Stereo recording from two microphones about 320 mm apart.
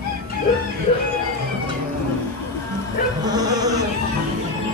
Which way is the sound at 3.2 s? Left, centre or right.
Centre.